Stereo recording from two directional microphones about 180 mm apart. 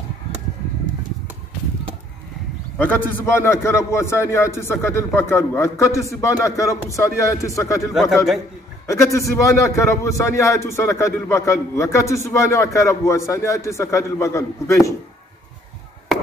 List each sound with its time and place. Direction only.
2.8 s a man's voice: 10° left (ahead or behind)
7.9 s a man's voice: centre (ahead or behind)
8.8 s a man's voice: 15° left (ahead or behind)